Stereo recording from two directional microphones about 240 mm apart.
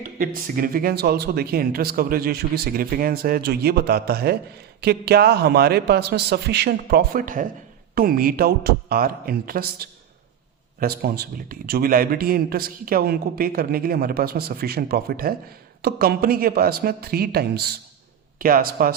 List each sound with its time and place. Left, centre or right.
0.2 s a man's voice: right